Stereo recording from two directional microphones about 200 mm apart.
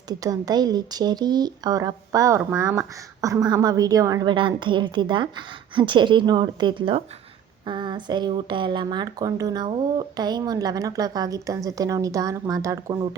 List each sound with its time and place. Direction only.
0.1 s speech: 20° right (ahead or behind)